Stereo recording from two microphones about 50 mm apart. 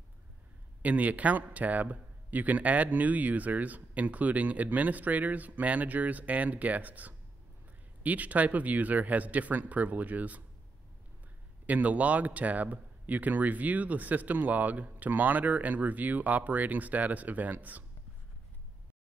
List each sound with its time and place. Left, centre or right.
0.8 s a man's voice: right
11.6 s a man's voice: right